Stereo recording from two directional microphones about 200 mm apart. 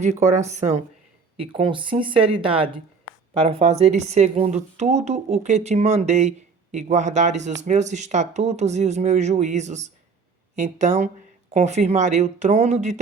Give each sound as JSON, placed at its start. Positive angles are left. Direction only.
{"t": 0.0, "sound": "speech", "side_deg": -35}